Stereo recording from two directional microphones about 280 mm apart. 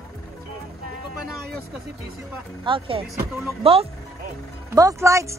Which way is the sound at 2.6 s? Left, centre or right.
Centre.